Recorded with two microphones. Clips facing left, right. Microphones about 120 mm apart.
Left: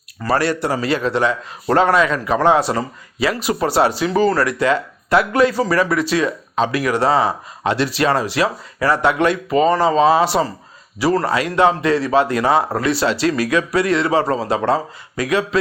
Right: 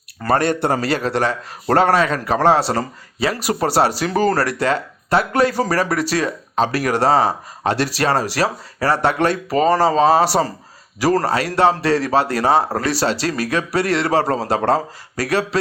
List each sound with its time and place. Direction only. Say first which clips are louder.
0.2 s speech: right 1 dB; 50° right (ahead or behind)
0.8 s speech: left 1 dB; 40° right (ahead or behind)